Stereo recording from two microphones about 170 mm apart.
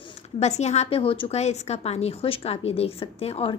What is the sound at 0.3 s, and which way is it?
A woman's voice, 40° left (ahead or behind).